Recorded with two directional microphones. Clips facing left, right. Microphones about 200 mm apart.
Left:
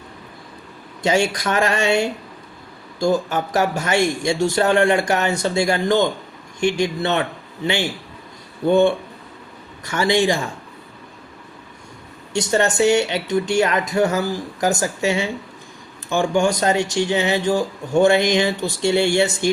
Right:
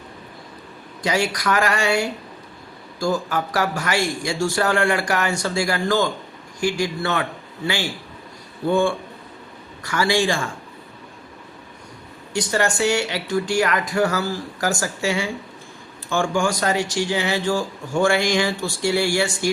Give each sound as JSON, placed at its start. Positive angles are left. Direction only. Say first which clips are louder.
{"t": 1.0, "sound": "a man's voice", "louder": "left 3 dB", "side_deg": 25}
{"t": 12.3, "sound": "speech", "louder": "left 3 dB", "side_deg": 25}